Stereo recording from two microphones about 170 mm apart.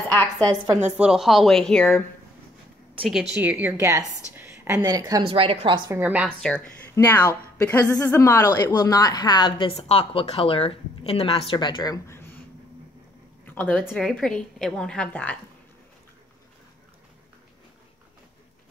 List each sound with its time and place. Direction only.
0.1 s a woman's voice: 10° left (ahead or behind)
0.9 s a woman's voice: 5° right (ahead or behind)
3.3 s a woman's voice: 10° right (ahead or behind)
4.4 s a sound: 10° right (ahead or behind)
4.8 s a woman's voice: 20° right (ahead or behind)
5.9 s a woman's voice: 10° right (ahead or behind)
6.4 s a woman's voice: 5° left (ahead or behind); by 12.2 s 25° left (ahead or behind)
13.5 s a woman's voice: 10° left (ahead or behind)